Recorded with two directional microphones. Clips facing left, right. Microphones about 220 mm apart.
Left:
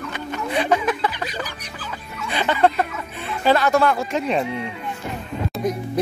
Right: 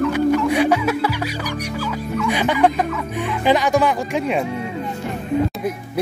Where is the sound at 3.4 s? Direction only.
15° right (ahead or behind).